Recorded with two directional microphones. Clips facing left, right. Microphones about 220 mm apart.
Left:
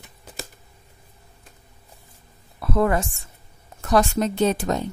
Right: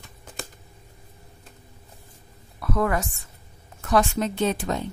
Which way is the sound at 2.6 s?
30° left (ahead or behind).